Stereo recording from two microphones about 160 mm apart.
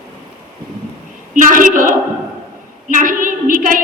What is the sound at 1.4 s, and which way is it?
A woman's voice, 55° right (ahead or behind).